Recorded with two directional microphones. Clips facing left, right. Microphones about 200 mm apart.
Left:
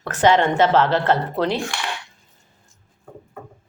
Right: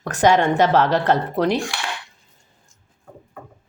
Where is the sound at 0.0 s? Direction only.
15° right (ahead or behind).